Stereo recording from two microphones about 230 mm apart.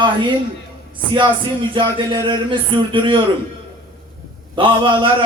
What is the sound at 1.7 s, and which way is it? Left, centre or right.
Speech, right.